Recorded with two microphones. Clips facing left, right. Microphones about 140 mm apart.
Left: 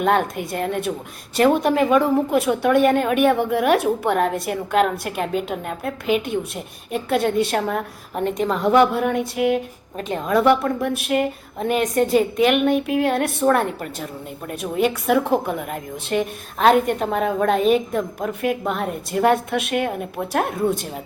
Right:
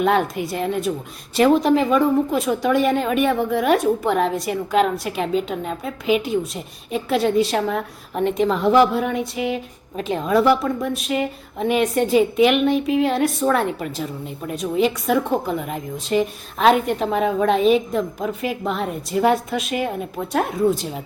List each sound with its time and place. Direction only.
0.0 s a woman's voice: centre (ahead or behind)